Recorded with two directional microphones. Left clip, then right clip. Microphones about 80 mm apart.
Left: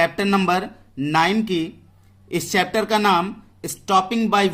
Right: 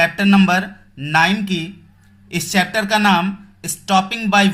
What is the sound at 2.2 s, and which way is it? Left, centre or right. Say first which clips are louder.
A man's voice: right 2 dB; left.